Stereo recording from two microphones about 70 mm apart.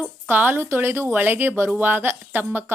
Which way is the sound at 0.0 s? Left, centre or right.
Right.